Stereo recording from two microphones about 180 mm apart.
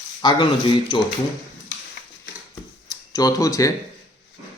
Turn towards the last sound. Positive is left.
turn(degrees=20)  # may be behind; listen again after turning